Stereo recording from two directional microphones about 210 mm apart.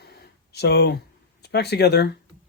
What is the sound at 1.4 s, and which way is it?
Speech, 50° left (ahead or behind).